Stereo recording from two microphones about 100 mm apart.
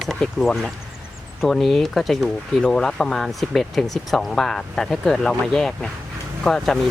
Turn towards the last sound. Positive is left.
turn(degrees=5)  # may be behind; listen again after turning